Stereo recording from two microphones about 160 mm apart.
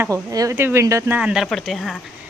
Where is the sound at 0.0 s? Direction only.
20° right (ahead or behind); by 2.0 s centre (ahead or behind).